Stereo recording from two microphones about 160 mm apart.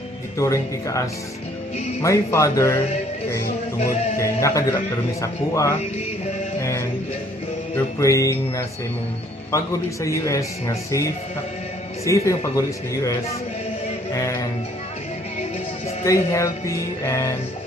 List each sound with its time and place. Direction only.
0.4 s speech: 20° left (ahead or behind)
2.0 s music: 15° left (ahead or behind)
4.2 s music: 20° left (ahead or behind)
5.2 s speech: 20° left (ahead or behind)
6.6 s music: 15° left (ahead or behind)
7.7 s speech: 20° left (ahead or behind)
10.0 s speech: 20° left (ahead or behind)
16.0 s music: 15° left (ahead or behind)